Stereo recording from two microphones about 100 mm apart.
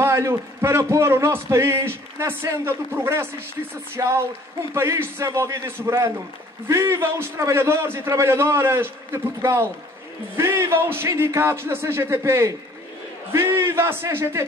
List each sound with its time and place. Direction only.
0.0 s a man's voice: 25° right (ahead or behind)